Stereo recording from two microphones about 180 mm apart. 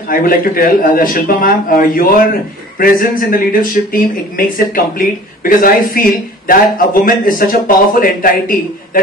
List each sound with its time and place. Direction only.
0.1 s speech: 55° left (ahead or behind)